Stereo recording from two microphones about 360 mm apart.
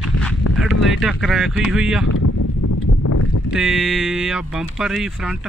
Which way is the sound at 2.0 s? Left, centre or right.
Left.